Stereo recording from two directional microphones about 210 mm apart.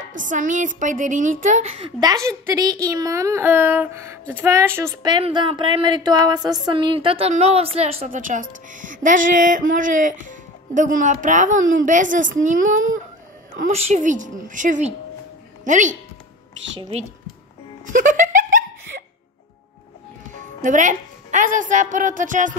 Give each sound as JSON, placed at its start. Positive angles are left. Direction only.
{"t": 0.0, "sound": "a woman's voice", "side_deg": -40}
{"t": 2.0, "sound": "a woman's voice", "side_deg": -15}
{"t": 17.8, "sound": "a sound", "side_deg": -40}
{"t": 20.6, "sound": "a woman's voice", "side_deg": -35}